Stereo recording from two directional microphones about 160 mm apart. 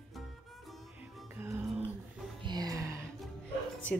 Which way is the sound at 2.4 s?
25° right (ahead or behind).